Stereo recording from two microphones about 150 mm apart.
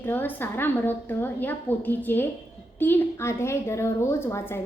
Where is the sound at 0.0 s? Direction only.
15° left (ahead or behind).